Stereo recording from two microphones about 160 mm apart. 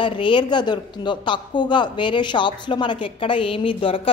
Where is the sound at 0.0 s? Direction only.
30° left (ahead or behind).